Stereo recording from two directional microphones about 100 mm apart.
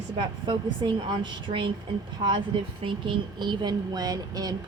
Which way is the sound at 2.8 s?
55° right (ahead or behind).